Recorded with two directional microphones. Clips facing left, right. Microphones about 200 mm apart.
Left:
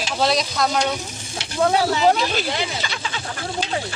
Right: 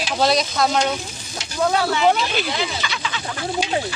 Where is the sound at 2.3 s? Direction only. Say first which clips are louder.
Even; 40° left (ahead or behind).